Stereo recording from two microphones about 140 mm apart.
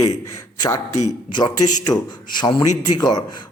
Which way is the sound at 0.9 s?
55° left (ahead or behind).